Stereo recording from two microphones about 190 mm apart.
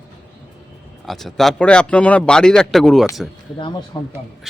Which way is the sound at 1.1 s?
Centre (ahead or behind).